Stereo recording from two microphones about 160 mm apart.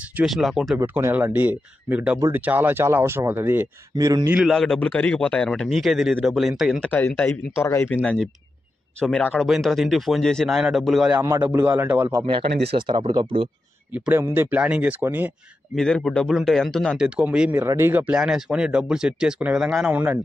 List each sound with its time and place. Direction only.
0.1 s speech: 5° right (ahead or behind)
0.7 s speech: 15° right (ahead or behind)
4.3 s speech: centre (ahead or behind)
6.9 s speech: 15° left (ahead or behind)
8.0 s speech: 5° left (ahead or behind)
11.2 s speech: 15° right (ahead or behind)
12.7 s speech: 30° right (ahead or behind)
13.9 s speech: 10° right (ahead or behind)
15.7 s speech: 5° left (ahead or behind)